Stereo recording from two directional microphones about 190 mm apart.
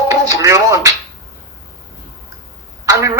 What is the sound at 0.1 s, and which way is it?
Music, 15° right (ahead or behind).